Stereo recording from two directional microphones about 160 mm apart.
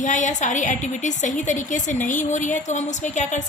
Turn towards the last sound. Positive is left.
turn(degrees=50)  # may be behind; listen again after turning